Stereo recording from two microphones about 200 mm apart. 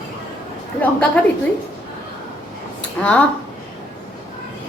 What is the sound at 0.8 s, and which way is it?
Speech, 5° left (ahead or behind).